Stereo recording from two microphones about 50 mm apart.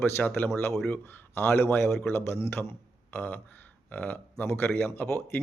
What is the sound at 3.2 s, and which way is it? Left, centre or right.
Speech, left.